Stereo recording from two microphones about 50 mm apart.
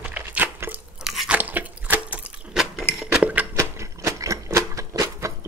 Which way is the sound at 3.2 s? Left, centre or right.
Right.